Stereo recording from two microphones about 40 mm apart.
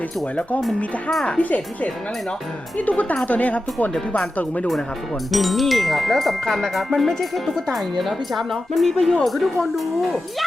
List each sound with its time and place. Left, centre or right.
1.4 s speech: left
5.3 s speech: centre